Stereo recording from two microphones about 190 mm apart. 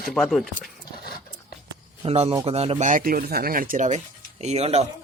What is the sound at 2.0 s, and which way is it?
Speech, 30° right (ahead or behind).